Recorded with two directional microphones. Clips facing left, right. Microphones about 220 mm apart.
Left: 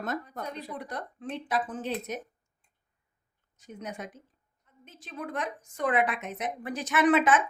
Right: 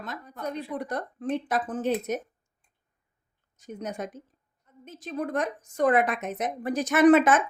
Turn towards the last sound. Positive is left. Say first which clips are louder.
# right 5 dB
turn(degrees=-45)  # may be behind; listen again after turning